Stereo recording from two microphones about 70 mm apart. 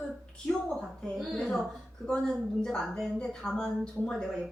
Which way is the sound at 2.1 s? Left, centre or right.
Centre.